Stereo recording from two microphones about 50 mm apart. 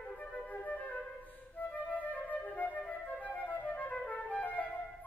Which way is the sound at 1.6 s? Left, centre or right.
Left.